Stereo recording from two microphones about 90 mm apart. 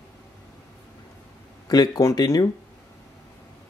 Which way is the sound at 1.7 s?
40° left (ahead or behind).